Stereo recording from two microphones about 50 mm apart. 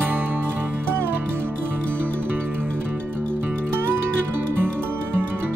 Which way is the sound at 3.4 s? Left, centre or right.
Right.